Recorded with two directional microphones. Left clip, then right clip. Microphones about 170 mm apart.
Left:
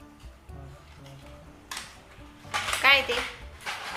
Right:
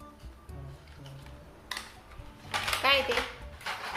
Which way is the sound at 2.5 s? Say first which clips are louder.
Left 5 dB; centre (ahead or behind).